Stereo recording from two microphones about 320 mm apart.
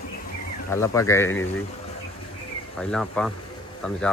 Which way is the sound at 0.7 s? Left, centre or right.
Centre.